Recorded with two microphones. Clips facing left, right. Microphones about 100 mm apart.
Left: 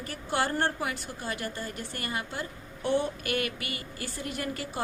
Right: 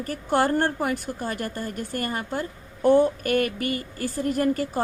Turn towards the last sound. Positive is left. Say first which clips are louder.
# right 11 dB
turn(degrees=-45)  # may be behind; listen again after turning